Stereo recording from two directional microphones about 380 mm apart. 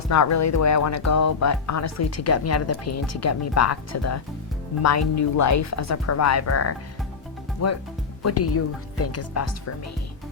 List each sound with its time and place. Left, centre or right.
0.1 s a woman's voice: left